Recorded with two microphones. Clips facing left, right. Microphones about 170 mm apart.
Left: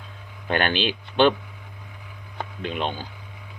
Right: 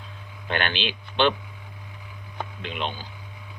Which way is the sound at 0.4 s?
45° left (ahead or behind).